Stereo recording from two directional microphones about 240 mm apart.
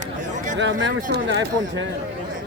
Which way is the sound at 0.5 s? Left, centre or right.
Right.